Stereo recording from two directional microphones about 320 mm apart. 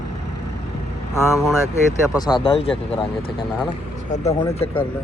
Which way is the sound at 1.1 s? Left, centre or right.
Centre.